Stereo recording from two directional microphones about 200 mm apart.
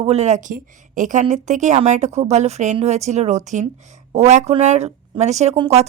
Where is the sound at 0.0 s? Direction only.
35° right (ahead or behind).